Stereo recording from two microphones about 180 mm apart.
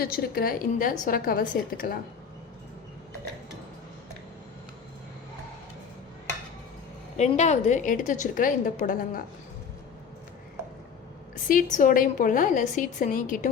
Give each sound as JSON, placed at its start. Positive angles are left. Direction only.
{"t": 0.0, "sound": "a woman's voice", "side_deg": 55}
{"t": 7.2, "sound": "a woman's voice", "side_deg": 40}
{"t": 11.4, "sound": "a woman's voice", "side_deg": 50}